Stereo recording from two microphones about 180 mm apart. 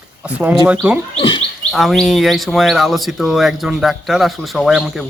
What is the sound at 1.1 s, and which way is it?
Livestock, 30° left (ahead or behind).